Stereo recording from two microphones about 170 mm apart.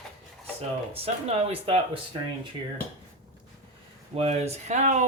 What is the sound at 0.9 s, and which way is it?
Speech, 40° right (ahead or behind).